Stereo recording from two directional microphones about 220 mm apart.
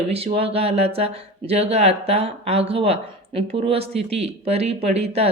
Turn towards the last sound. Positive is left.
turn(degrees=-30)  # may be behind; listen again after turning